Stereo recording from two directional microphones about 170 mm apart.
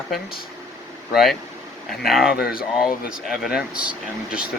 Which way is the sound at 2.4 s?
65° left (ahead or behind).